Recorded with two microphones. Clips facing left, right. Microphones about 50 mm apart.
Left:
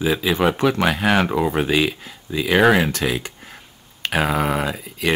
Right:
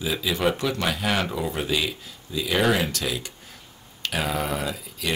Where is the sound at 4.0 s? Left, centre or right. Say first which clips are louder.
Left 6 dB; left.